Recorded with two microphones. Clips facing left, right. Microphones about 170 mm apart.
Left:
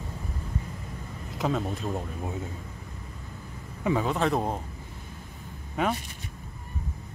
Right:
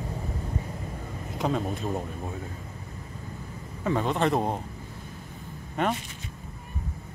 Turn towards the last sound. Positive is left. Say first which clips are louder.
# even
turn(degrees=5)  # may be behind; listen again after turning